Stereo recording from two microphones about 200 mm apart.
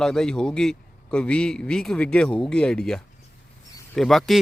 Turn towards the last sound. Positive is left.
turn(degrees=0)  # may be behind; listen again after turning